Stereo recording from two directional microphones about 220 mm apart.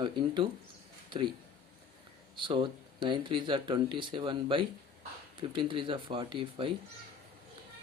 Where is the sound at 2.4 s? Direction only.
20° right (ahead or behind).